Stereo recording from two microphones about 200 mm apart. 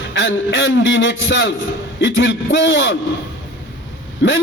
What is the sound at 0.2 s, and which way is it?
A man's voice, 70° left (ahead or behind).